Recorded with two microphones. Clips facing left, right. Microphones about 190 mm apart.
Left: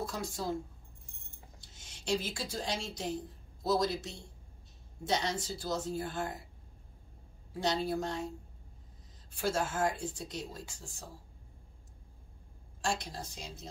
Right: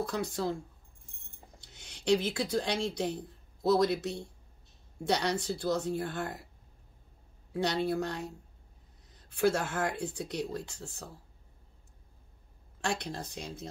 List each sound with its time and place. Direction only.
0.0 s a woman's voice: 65° right (ahead or behind)
1.6 s a woman's voice: 60° right (ahead or behind)
7.5 s a woman's voice: 60° right (ahead or behind)
9.3 s a woman's voice: 60° right (ahead or behind)
12.8 s a woman's voice: 60° right (ahead or behind)